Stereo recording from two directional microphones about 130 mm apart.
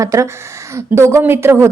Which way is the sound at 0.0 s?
25° right (ahead or behind).